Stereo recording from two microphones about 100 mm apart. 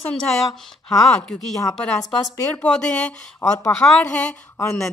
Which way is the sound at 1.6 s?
35° left (ahead or behind).